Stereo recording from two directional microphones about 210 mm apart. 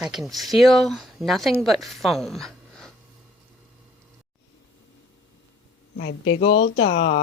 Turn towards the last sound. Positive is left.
turn(degrees=30)  # may be behind; listen again after turning